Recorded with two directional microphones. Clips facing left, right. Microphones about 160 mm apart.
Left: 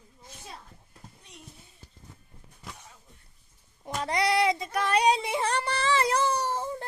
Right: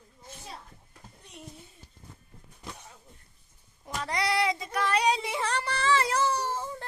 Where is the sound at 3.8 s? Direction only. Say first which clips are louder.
Left 3 dB; 20° left (ahead or behind).